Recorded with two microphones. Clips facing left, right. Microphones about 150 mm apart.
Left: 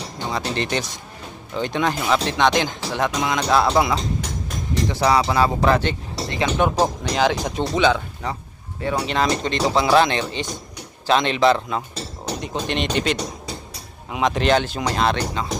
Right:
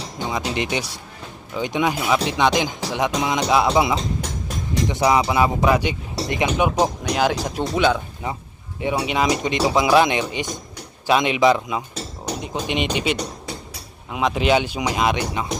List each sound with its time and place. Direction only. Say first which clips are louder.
0.3 s speech: even; 10° right (ahead or behind)